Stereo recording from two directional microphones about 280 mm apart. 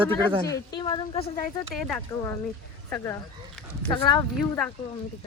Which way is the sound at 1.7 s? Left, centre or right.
Centre.